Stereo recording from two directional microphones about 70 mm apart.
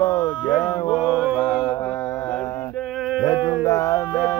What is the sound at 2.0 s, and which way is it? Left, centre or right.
Mantra, left.